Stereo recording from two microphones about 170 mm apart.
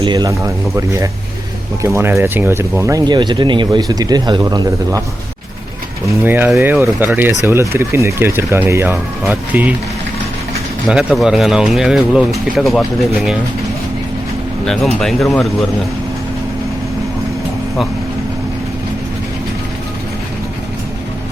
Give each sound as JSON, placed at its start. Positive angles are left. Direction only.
{"t": 0.0, "sound": "speech", "side_deg": -25}
{"t": 6.1, "sound": "speech", "side_deg": -10}
{"t": 10.8, "sound": "speech", "side_deg": -5}
{"t": 14.7, "sound": "speech", "side_deg": 0}